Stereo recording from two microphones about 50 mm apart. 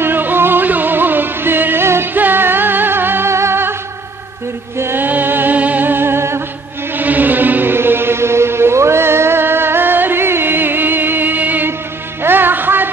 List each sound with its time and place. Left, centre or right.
0.0 s music: right
2.1 s music: right
3.3 s music: right
4.9 s music: right
7.0 s music: right
12.2 s music: right